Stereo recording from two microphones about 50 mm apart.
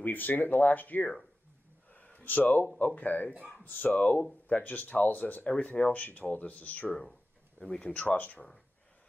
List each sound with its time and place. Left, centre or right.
0.0 s speech: left
1.9 s a sound: left
2.8 s speech: left
7.6 s speech: centre
8.0 s speech: left